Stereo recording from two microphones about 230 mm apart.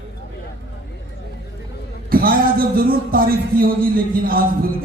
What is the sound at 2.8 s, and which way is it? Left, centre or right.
A man's voice, right.